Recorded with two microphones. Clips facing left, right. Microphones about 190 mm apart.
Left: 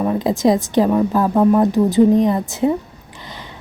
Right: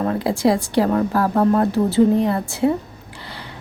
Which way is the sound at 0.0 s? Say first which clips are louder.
Left 2 dB; 15° left (ahead or behind).